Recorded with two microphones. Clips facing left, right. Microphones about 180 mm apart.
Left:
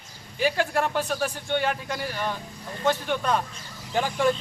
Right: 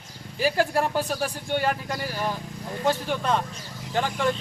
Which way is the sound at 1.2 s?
40° right (ahead or behind).